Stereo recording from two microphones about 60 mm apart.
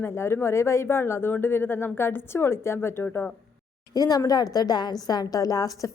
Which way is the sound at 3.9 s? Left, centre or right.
Left.